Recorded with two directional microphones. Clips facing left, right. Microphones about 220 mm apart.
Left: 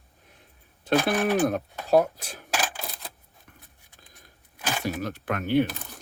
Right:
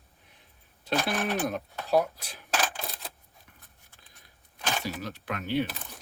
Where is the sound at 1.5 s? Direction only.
50° left (ahead or behind).